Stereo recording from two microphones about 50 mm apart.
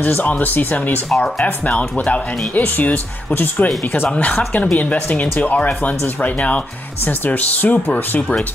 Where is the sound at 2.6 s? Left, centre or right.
Left.